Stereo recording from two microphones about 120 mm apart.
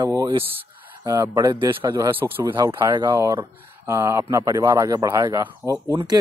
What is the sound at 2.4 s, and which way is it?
A man's voice, 40° right (ahead or behind).